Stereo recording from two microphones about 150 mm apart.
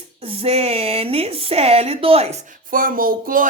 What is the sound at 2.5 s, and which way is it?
Child singing, 65° right (ahead or behind).